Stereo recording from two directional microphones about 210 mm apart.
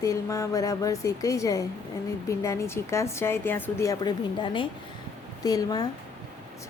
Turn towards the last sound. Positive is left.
turn(degrees=15)  # may be behind; listen again after turning